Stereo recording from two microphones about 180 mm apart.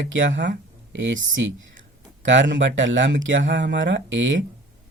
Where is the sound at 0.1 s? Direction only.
90° right.